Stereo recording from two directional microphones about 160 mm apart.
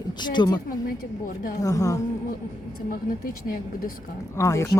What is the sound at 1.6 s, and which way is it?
Speech, 20° left (ahead or behind).